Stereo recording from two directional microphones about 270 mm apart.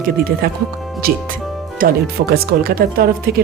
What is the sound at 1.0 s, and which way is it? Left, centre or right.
Speech, right.